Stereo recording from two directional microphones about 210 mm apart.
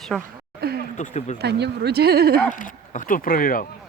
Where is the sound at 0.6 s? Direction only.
50° right (ahead or behind).